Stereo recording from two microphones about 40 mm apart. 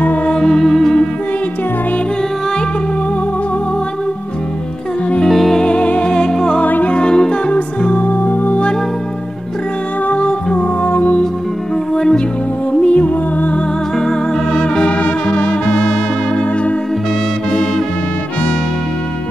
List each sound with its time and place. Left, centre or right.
0.3 s music: centre
5.3 s music: centre
5.6 s music: left
6.6 s music: left
6.9 s music: left
8.1 s music: left
10.0 s music: left
11.9 s music: centre
12.8 s music: left
13.9 s music: centre
14.8 s music: left